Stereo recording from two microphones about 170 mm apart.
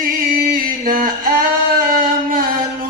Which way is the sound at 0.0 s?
55° right (ahead or behind).